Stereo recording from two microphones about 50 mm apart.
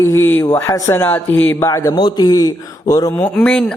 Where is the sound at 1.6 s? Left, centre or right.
Left.